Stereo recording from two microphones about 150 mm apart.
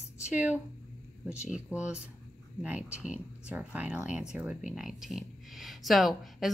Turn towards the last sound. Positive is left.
turn(degrees=0)  # may be behind; listen again after turning